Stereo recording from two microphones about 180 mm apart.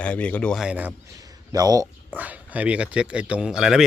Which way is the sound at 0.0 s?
5° left (ahead or behind).